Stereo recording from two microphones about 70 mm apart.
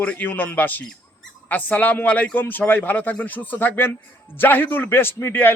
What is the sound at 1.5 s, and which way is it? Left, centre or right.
Speech, left.